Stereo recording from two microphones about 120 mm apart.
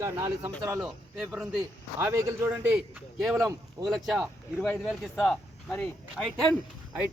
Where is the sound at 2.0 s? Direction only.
20° right (ahead or behind).